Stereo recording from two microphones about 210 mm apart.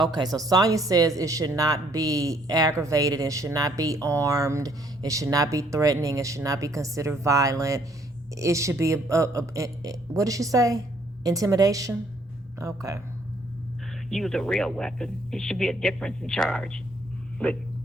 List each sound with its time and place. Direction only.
0.0 s a woman's voice: 20° right (ahead or behind)
14.1 s speech: centre (ahead or behind)